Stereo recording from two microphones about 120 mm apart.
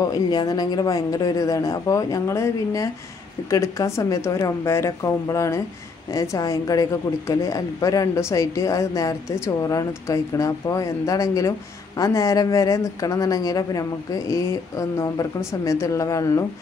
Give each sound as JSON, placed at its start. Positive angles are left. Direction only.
{"t": 0.0, "sound": "speech", "side_deg": 35}